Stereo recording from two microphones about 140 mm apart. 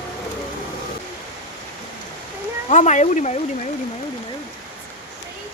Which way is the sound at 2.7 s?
60° left (ahead or behind).